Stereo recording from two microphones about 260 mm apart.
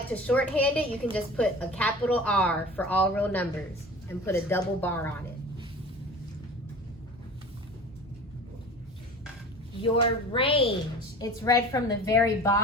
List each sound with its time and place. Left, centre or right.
0.1 s a woman's voice: centre
9.8 s a woman's voice: left